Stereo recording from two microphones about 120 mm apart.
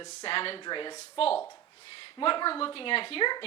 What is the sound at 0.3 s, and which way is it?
Speech, 50° left (ahead or behind).